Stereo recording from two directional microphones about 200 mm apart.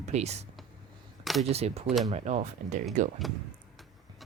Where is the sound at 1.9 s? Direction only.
Centre (ahead or behind).